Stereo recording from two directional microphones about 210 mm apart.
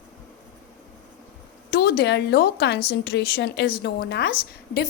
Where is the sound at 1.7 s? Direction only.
50° left (ahead or behind).